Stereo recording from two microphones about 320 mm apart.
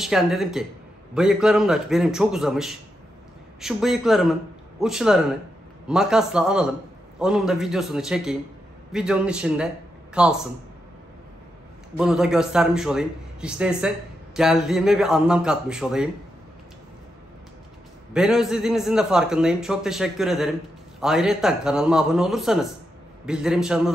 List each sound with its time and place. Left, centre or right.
0.0 s a man's voice: centre
12.0 s a man's voice: centre
18.1 s a man's voice: centre